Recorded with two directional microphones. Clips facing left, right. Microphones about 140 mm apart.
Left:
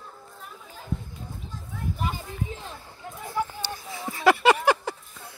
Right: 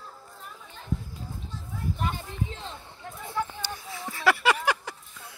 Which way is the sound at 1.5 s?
5° left (ahead or behind).